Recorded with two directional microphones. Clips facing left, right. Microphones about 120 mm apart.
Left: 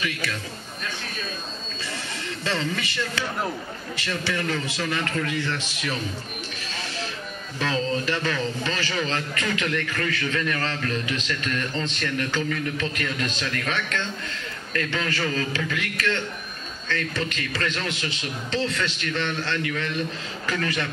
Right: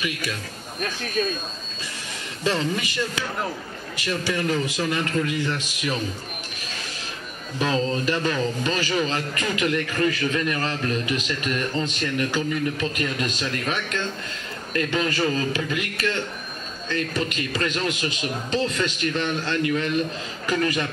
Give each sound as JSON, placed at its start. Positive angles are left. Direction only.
{"t": 0.0, "sound": "a man's voice", "side_deg": -15}
{"t": 2.4, "sound": "a man's voice", "side_deg": -15}
{"t": 7.5, "sound": "a man's voice", "side_deg": -15}